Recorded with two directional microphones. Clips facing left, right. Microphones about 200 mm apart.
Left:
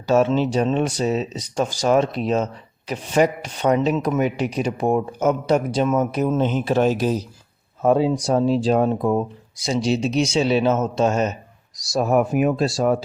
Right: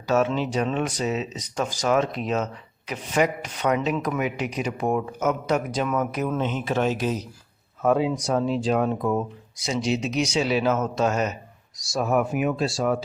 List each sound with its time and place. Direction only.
0.1 s speech: 30° left (ahead or behind)
11.8 s speech: 40° left (ahead or behind)